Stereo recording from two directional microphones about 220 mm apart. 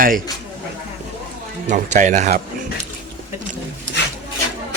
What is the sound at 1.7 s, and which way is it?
Speech, 35° right (ahead or behind).